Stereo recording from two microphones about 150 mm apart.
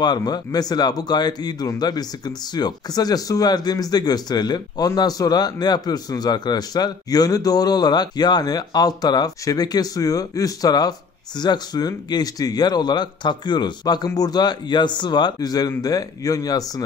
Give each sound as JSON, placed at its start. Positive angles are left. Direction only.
{"t": 0.0, "sound": "speech", "side_deg": 30}